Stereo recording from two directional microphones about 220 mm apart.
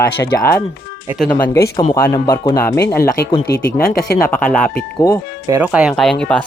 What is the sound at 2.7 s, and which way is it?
Speech, 45° left (ahead or behind).